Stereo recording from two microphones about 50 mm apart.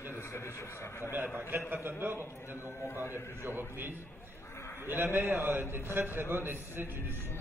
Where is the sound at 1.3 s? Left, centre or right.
Right.